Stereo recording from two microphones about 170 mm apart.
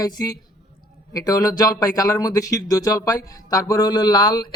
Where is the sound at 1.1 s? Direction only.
20° left (ahead or behind).